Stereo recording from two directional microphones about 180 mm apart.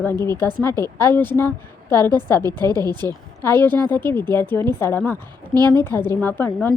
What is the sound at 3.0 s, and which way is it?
A woman's voice, 15° left (ahead or behind).